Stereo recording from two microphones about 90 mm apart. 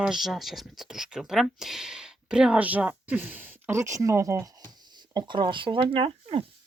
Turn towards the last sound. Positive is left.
turn(degrees=-90)